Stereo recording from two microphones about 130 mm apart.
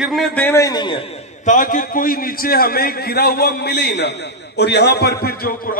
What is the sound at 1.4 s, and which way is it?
Speech, 85° left.